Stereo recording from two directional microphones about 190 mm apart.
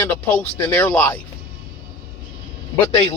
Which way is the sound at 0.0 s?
10° left (ahead or behind).